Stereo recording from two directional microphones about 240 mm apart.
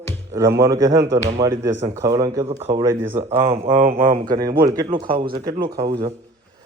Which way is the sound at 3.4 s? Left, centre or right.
Right.